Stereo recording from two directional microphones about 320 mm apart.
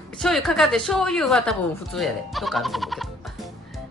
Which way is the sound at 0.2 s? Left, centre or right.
Centre.